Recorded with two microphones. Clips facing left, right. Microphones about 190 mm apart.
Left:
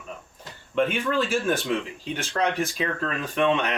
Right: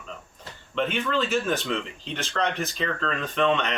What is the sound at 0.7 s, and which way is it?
Speech, 10° left (ahead or behind).